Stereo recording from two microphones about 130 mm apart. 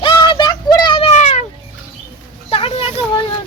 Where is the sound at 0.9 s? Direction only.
55° left (ahead or behind).